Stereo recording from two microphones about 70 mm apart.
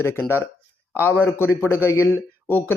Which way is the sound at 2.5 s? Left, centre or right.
Left.